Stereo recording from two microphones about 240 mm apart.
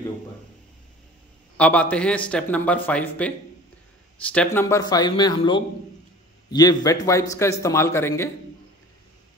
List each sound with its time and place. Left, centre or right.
1.6 s a man's voice: centre